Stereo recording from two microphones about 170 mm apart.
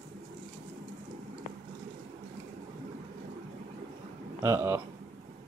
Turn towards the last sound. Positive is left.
turn(degrees=-20)  # may be behind; listen again after turning